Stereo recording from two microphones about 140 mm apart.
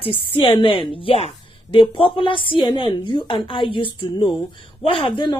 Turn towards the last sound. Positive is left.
turn(degrees=35)  # may be behind; listen again after turning